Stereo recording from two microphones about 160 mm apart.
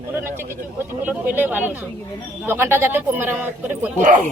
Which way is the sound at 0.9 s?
10° right (ahead or behind).